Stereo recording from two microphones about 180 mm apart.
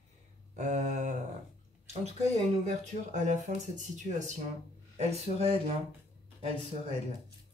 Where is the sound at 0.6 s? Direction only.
40° right (ahead or behind).